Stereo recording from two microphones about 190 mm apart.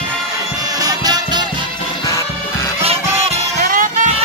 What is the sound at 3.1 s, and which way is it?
Music, 30° right (ahead or behind).